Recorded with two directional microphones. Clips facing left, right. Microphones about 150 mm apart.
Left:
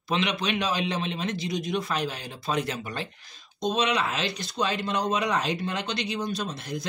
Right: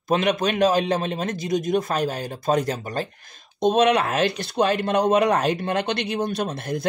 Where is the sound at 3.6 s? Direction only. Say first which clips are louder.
Right 8 dB; 55° right (ahead or behind).